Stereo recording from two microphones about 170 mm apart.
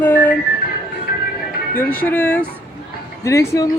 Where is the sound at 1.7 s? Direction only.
10° left (ahead or behind).